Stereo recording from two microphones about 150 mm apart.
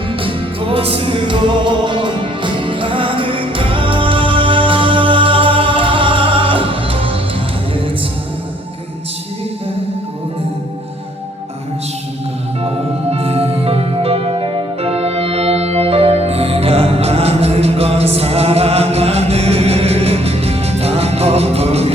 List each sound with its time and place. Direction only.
0.1 s music: 35° right (ahead or behind)
12.6 s music: 40° right (ahead or behind)